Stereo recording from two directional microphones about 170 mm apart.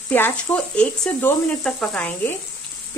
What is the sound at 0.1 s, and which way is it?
Speech, 10° left (ahead or behind).